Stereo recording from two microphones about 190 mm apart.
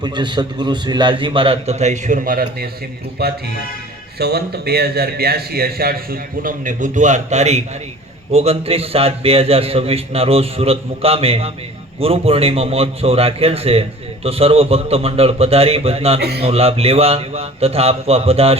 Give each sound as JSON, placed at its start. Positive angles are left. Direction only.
{"t": 0.0, "sound": "a man's voice", "side_deg": -25}